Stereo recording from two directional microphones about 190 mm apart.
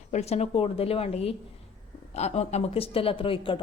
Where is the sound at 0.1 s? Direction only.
35° left (ahead or behind).